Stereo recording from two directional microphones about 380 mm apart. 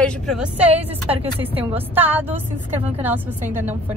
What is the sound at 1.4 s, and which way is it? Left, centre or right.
A woman's voice, centre.